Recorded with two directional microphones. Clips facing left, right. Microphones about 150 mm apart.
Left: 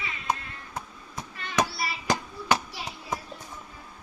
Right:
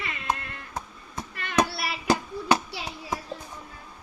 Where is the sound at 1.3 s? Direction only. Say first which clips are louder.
Right 2 dB; 65° right (ahead or behind).